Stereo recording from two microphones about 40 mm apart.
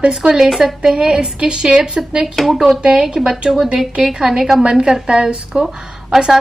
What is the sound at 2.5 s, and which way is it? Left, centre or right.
A woman's voice, centre.